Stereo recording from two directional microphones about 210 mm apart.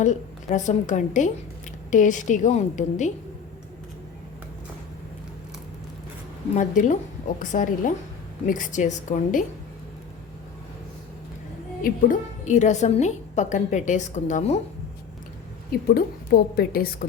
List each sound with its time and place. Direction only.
0.0 s a woman's voice: 35° left (ahead or behind)
6.5 s a woman's voice: 35° left (ahead or behind)
11.8 s a woman's voice: 35° left (ahead or behind)
16.0 s a woman's voice: 45° left (ahead or behind)